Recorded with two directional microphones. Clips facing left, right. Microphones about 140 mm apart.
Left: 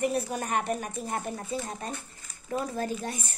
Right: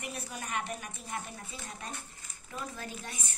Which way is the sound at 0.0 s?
40° left (ahead or behind).